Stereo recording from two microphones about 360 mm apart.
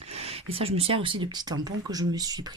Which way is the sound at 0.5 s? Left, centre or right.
Centre.